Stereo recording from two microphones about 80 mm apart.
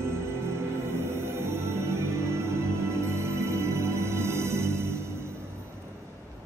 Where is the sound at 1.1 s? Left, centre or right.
Right.